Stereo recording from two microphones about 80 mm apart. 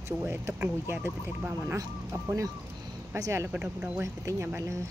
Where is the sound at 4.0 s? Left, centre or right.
Right.